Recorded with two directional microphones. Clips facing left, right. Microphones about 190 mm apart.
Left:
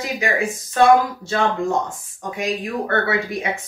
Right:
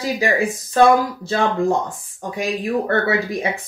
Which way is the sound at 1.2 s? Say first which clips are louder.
Right 2 dB; 35° right (ahead or behind).